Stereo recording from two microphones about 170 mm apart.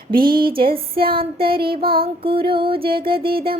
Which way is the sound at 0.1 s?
60° right (ahead or behind).